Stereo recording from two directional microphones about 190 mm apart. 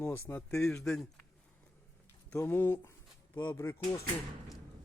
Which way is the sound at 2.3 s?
10° left (ahead or behind).